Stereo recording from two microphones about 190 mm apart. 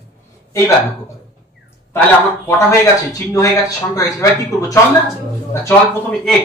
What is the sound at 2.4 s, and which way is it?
Speech, 15° left (ahead or behind).